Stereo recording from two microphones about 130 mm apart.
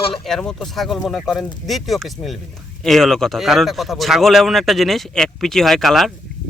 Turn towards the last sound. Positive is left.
turn(degrees=0)  # may be behind; listen again after turning